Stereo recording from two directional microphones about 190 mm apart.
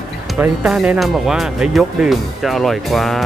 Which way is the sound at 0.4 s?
5° right (ahead or behind).